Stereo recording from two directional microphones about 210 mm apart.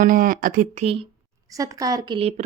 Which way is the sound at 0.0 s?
40° right (ahead or behind).